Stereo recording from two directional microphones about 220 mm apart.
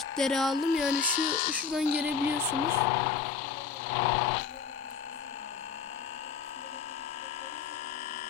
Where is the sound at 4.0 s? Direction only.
30° left (ahead or behind).